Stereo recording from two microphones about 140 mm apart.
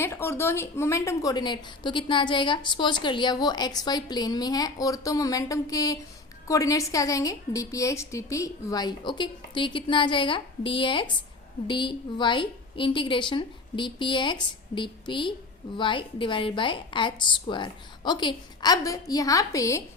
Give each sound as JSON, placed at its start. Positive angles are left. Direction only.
{"t": 0.0, "sound": "a woman's voice", "side_deg": 15}